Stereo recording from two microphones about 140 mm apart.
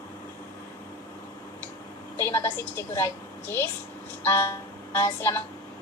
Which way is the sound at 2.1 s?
20° left (ahead or behind).